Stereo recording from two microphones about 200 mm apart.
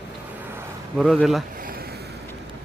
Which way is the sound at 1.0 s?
Centre (ahead or behind).